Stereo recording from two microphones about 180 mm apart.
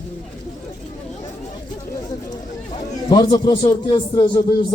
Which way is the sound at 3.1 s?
20° left (ahead or behind).